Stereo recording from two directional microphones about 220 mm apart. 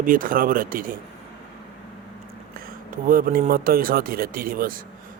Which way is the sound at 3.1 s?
40° right (ahead or behind).